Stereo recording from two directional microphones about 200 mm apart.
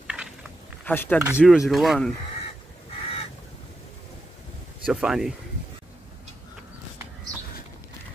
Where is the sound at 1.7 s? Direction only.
Centre (ahead or behind).